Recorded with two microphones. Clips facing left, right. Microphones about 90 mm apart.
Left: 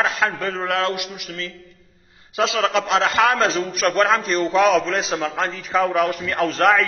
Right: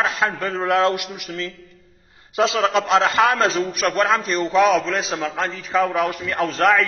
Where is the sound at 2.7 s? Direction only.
5° right (ahead or behind).